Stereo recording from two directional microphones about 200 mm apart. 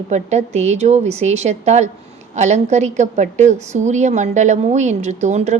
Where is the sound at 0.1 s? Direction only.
35° right (ahead or behind).